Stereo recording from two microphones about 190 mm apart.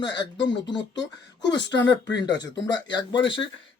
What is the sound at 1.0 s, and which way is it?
Speech, 70° left (ahead or behind).